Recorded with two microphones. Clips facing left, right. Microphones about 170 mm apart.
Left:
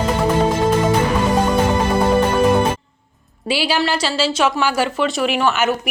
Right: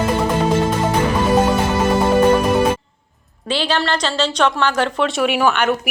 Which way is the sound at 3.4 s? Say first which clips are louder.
Left 1 dB; 10° left (ahead or behind).